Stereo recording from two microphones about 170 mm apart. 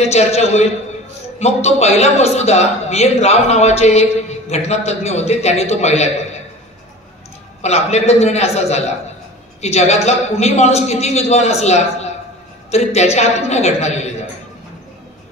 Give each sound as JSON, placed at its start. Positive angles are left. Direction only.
{"t": 0.0, "sound": "a man's voice", "side_deg": 40}
{"t": 7.6, "sound": "a man's voice", "side_deg": 40}